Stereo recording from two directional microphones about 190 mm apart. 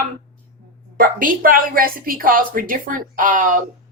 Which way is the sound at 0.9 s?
45° right (ahead or behind).